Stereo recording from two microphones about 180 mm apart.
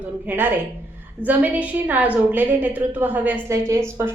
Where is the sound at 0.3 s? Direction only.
10° right (ahead or behind).